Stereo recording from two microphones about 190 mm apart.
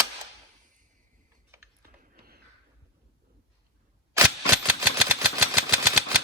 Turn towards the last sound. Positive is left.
turn(degrees=-10)  # may be behind; listen again after turning